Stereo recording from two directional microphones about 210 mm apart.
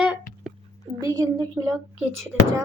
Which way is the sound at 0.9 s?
20° right (ahead or behind).